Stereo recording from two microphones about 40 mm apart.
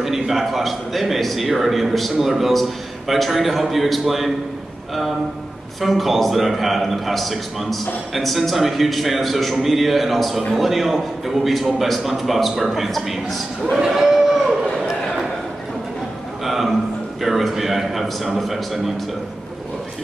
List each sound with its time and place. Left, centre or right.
0.0 s a man's voice: centre
5.8 s a man's voice: centre
14.0 s livestock: centre
16.4 s a sound: centre
17.2 s a man's voice: centre